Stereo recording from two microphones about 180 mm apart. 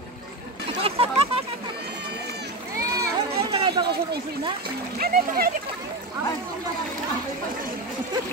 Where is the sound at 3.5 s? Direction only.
25° right (ahead or behind).